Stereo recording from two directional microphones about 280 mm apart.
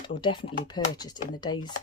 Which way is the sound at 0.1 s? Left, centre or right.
Centre.